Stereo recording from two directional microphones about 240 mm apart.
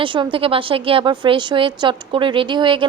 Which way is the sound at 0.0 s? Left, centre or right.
Right.